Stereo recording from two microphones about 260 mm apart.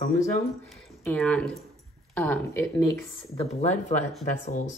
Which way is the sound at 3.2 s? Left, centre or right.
Left.